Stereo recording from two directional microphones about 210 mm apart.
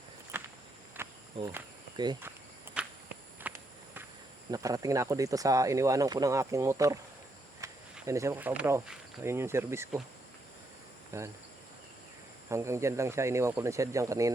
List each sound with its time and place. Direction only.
0.3 s walk: 10° right (ahead or behind)
1.0 s insect: 10° right (ahead or behind)
1.5 s walk: 15° right (ahead or behind)
3.4 s a sound: 10° right (ahead or behind)
4.5 s speech: 15° right (ahead or behind)
7.6 s cricket: 15° right (ahead or behind)
8.0 s speech: 15° right (ahead or behind)
11.1 s speech: 15° right (ahead or behind)
12.5 s speech: 15° right (ahead or behind)